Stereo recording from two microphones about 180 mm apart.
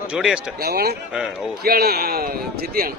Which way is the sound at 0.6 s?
60° right (ahead or behind).